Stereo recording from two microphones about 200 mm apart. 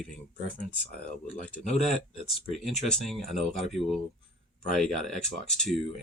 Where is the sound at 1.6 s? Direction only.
35° left (ahead or behind).